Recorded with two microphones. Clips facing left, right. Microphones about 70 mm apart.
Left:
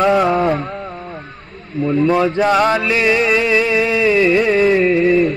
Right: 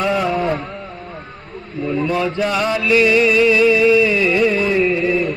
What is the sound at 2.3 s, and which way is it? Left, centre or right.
Music, left.